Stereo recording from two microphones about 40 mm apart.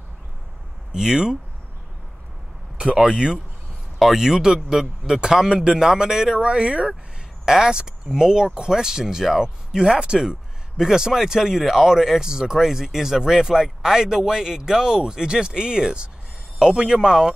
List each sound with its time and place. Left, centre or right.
0.9 s speech: centre
2.8 s speech: centre
4.0 s speech: centre; by 7.0 s right
7.4 s speech: centre